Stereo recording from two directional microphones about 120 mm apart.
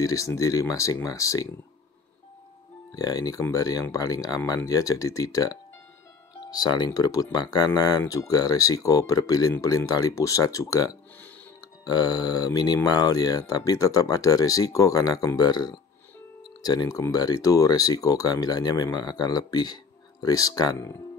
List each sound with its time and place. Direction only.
0.0 s speech: 25° left (ahead or behind)
2.9 s speech: 30° left (ahead or behind)